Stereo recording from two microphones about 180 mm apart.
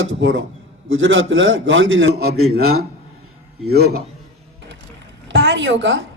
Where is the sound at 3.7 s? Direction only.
60° right (ahead or behind).